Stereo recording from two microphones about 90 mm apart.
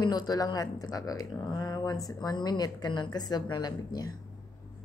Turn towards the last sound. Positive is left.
turn(degrees=50)  # may be behind; listen again after turning